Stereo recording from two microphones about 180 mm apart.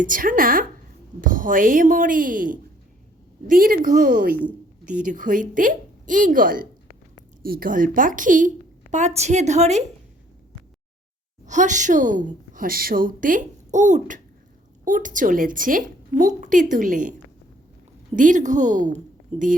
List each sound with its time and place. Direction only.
0.0 s a woman's voice: 50° right (ahead or behind)
11.4 s a woman's voice: 45° right (ahead or behind)
18.2 s a woman's voice: 45° right (ahead or behind)